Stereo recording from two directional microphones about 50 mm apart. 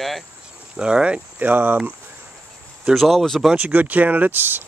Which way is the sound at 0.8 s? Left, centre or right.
Centre.